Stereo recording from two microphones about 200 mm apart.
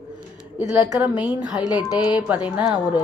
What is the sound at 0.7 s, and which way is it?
A woman's voice, 5° right (ahead or behind).